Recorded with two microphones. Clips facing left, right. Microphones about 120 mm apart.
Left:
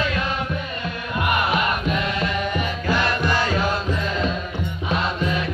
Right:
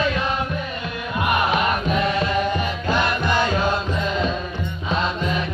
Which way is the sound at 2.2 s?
25° right (ahead or behind).